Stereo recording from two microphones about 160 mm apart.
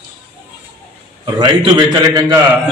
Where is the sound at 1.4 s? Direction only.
25° right (ahead or behind).